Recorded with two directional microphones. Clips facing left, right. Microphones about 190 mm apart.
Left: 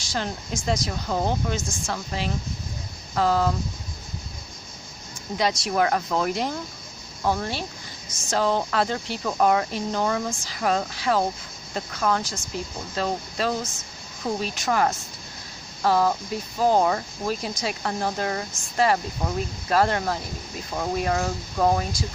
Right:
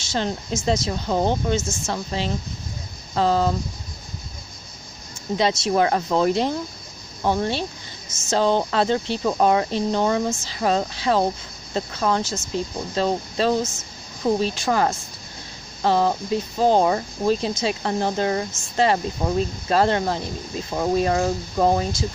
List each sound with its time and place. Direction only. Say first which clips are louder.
0.0 s speech: right 4 dB; 25° right (ahead or behind)
5.4 s speech: right 3 dB; 25° right (ahead or behind)